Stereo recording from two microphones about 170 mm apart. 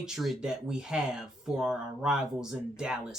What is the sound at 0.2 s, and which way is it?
Speech, 5° right (ahead or behind).